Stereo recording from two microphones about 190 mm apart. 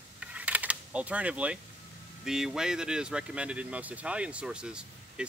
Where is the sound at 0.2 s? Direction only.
5° right (ahead or behind).